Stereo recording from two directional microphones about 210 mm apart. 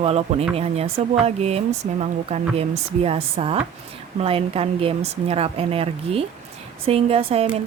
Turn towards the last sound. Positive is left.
turn(degrees=-25)  # may be behind; listen again after turning